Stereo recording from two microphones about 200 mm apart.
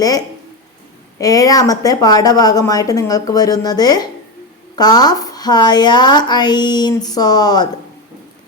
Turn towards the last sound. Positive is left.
turn(degrees=20)  # may be behind; listen again after turning